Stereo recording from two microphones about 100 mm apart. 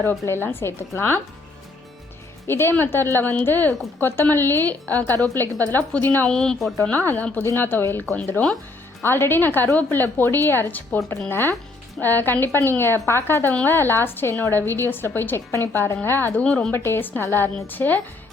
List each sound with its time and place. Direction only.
0.1 s a woman's voice: 20° left (ahead or behind)
2.5 s a woman's voice: 25° left (ahead or behind)
6.2 s a woman's voice: 5° left (ahead or behind)
6.9 s a woman's voice: 20° left (ahead or behind)
16.4 s speech: 5° left (ahead or behind)
16.7 s a woman's voice: 25° left (ahead or behind)